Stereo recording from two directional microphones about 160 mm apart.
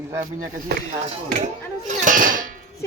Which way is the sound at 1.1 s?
50° right (ahead or behind).